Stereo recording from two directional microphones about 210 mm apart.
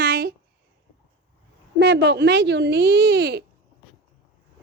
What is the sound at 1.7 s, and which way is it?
Speech, 55° right (ahead or behind).